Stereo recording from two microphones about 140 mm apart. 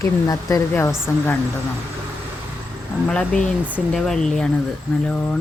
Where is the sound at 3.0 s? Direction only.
10° left (ahead or behind).